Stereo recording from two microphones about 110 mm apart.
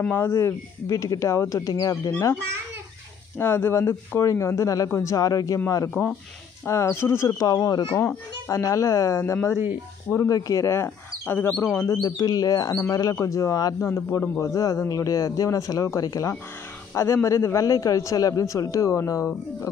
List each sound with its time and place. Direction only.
0.1 s a man's voice: 20° left (ahead or behind)
3.3 s a man's voice: 20° left (ahead or behind)
6.0 s a man's voice: 15° left (ahead or behind)
12.0 s a man's voice: 35° left (ahead or behind)